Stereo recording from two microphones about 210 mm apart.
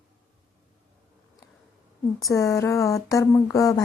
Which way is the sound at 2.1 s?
15° left (ahead or behind).